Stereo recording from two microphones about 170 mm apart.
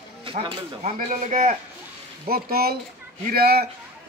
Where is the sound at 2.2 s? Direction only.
60° right (ahead or behind).